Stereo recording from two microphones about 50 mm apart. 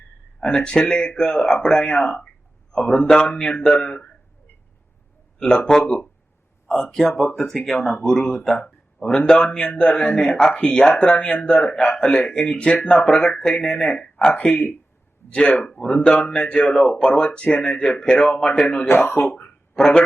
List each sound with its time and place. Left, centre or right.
0.3 s speech: centre
5.4 s speech: centre
6.9 s speech: centre
14.3 s speech: left
18.9 s speech: left
19.5 s a sound: centre